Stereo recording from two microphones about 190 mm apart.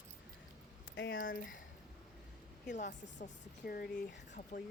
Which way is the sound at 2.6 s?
40° left (ahead or behind).